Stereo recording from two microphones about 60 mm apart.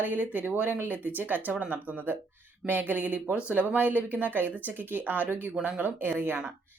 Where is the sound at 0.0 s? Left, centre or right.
Right.